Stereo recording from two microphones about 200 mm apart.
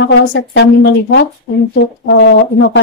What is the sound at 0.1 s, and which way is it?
A woman's voice, 65° left (ahead or behind).